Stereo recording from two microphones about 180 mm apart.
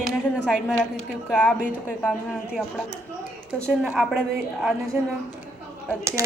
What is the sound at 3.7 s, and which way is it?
A woman's voice, 5° right (ahead or behind).